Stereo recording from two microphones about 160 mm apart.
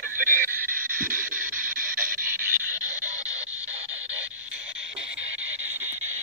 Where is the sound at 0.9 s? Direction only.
60° right (ahead or behind).